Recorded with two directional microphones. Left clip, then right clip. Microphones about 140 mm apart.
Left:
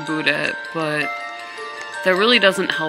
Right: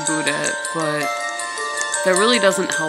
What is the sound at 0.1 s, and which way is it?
Speech, 15° right (ahead or behind).